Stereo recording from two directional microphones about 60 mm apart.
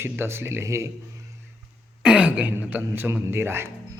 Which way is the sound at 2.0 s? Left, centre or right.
Right.